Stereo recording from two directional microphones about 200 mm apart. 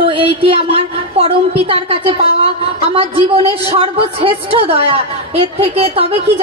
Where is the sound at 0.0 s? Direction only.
25° right (ahead or behind).